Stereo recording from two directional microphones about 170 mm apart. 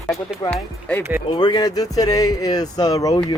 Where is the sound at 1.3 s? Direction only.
25° left (ahead or behind).